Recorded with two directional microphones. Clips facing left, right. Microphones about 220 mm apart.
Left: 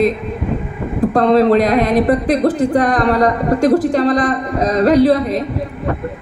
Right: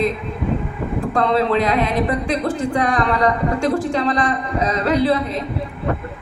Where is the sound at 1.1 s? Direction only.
40° left (ahead or behind).